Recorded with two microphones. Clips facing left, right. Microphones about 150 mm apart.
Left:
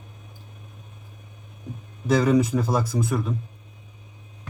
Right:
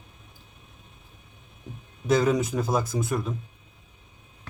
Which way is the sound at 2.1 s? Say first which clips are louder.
Left 3 dB; centre (ahead or behind).